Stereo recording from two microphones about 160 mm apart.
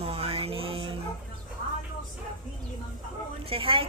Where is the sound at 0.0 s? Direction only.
40° right (ahead or behind).